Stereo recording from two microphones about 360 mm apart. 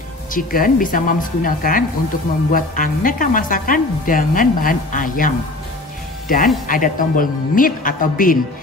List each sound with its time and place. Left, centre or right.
0.3 s speech: left